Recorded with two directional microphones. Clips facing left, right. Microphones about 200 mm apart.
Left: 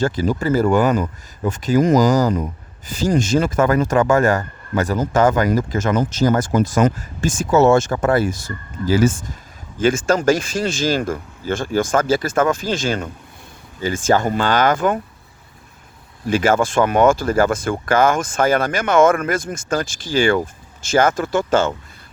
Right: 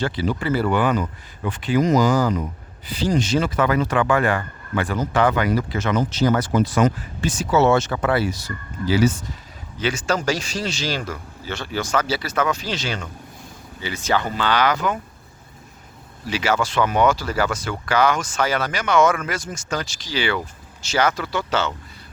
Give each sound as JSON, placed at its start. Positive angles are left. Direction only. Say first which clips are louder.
{"t": 0.0, "sound": "speech", "louder": "left 4 dB", "side_deg": 45}
{"t": 16.2, "sound": "speech", "louder": "left 6 dB", "side_deg": 50}